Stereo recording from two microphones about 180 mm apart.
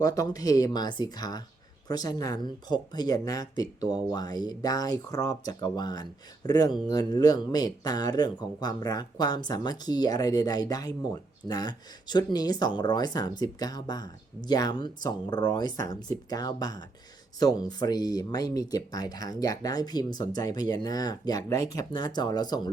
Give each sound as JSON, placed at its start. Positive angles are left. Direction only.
{"t": 0.0, "sound": "speech", "side_deg": 20}